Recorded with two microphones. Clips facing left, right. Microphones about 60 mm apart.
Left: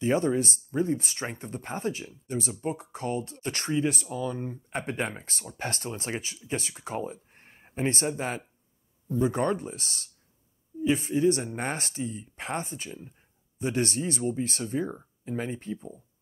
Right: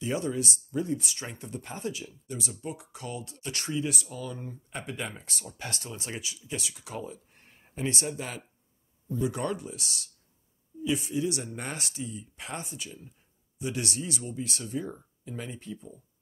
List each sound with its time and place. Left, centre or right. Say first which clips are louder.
0.0 s speech: left 5 dB; left